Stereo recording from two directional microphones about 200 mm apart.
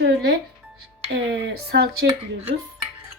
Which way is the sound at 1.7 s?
60° right (ahead or behind).